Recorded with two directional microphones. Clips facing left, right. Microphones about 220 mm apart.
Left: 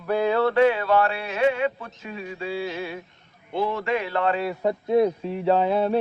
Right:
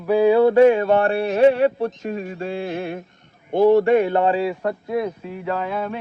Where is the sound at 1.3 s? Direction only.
35° right (ahead or behind).